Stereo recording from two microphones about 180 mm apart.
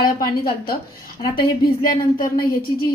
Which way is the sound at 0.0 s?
55° left (ahead or behind).